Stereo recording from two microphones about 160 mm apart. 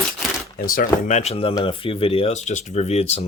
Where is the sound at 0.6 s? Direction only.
65° left (ahead or behind).